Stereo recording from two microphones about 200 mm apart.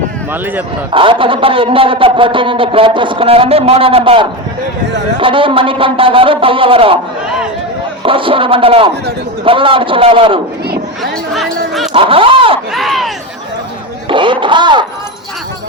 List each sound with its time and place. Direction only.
0.9 s a man's voice: 25° right (ahead or behind)
8.0 s a man's voice: 25° right (ahead or behind)
11.3 s speech: centre (ahead or behind)
11.9 s a man's voice: 25° right (ahead or behind)
12.7 s speech: centre (ahead or behind)
14.1 s speech: 25° right (ahead or behind)